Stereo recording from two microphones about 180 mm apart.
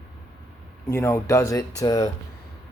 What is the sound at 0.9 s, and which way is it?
Speech, 15° left (ahead or behind).